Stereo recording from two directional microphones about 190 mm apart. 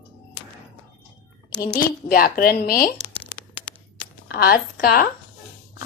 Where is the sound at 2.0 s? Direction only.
50° left (ahead or behind).